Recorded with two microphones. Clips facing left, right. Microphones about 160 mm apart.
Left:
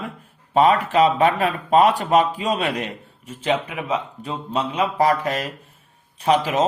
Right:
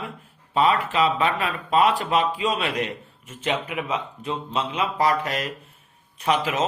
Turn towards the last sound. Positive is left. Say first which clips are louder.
# left 4 dB
turn(degrees=35)  # may be behind; listen again after turning